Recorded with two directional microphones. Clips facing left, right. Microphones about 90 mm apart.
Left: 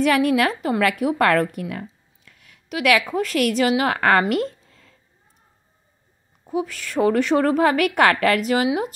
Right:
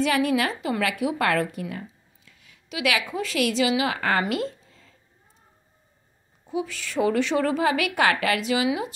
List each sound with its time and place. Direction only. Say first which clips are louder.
0.0 s a woman's voice: left 4 dB; 50° left (ahead or behind)
6.4 s a woman's voice: left 4 dB; 45° left (ahead or behind)